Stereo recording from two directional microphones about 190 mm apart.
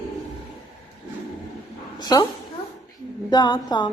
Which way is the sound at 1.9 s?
20° left (ahead or behind).